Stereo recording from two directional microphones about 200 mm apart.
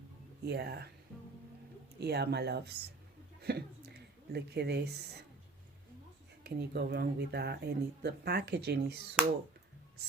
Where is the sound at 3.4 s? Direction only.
55° right (ahead or behind).